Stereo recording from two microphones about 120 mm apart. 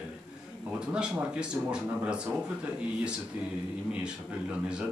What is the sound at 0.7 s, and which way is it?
A man's voice, 10° right (ahead or behind).